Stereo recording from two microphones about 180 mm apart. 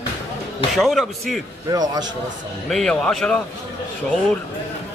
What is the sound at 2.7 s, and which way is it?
Speech, 5° left (ahead or behind).